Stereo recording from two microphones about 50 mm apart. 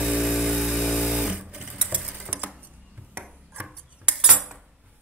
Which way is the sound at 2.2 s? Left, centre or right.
Right.